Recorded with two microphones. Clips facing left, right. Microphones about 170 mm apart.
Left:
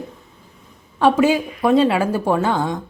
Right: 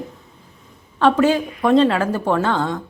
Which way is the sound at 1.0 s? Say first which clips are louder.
Even; 10° left (ahead or behind).